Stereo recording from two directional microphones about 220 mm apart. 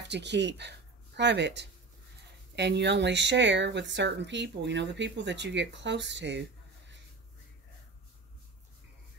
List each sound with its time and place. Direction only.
0.1 s speech: 50° right (ahead or behind)